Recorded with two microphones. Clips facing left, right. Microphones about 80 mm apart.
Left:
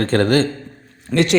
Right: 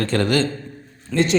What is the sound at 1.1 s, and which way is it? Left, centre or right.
Speech, left.